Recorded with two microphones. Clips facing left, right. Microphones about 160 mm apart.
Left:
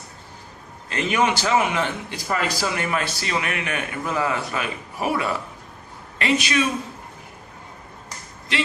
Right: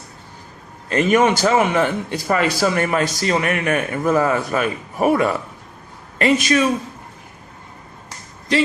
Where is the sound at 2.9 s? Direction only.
45° right (ahead or behind).